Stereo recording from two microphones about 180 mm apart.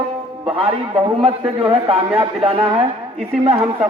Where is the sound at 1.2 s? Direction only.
30° right (ahead or behind).